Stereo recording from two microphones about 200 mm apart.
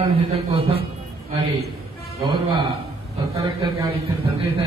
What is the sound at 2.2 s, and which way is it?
A man's voice, 25° right (ahead or behind).